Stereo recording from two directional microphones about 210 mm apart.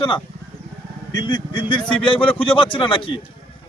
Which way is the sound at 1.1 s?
20° left (ahead or behind).